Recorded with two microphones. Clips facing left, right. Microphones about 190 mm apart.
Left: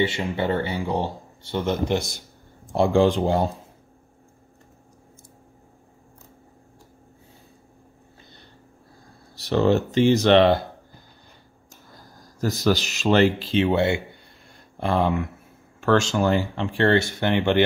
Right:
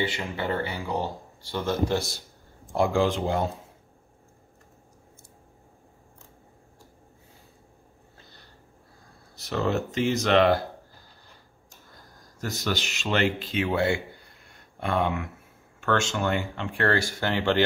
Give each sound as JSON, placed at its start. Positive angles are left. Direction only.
{"t": 0.0, "sound": "speech", "side_deg": 25}
{"t": 9.3, "sound": "speech", "side_deg": 35}
{"t": 12.4, "sound": "speech", "side_deg": 35}